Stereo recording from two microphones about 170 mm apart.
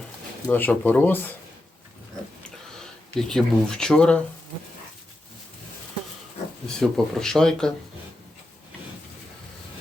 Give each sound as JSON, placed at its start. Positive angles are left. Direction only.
{"t": 0.4, "sound": "speech", "side_deg": 10}
{"t": 2.4, "sound": "a sound", "side_deg": 5}
{"t": 6.7, "sound": "speech", "side_deg": 5}